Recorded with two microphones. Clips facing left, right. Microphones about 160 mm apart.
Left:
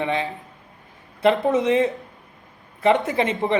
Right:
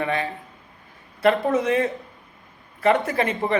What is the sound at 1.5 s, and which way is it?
Speech, 20° left (ahead or behind).